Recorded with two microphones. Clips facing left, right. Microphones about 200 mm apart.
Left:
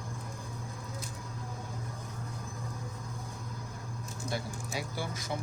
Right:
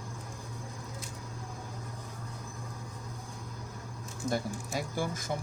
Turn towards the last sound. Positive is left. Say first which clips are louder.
# right 3 dB
turn(degrees=-50)  # may be behind; listen again after turning